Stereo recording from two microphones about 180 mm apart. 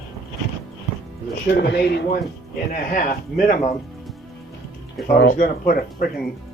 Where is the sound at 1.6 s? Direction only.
70° left (ahead or behind).